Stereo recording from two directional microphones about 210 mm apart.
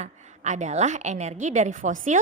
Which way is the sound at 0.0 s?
35° right (ahead or behind).